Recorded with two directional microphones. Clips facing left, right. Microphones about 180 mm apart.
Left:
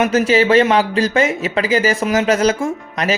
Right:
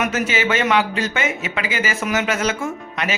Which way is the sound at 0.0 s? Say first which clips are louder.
Left 7 dB; 30° left (ahead or behind).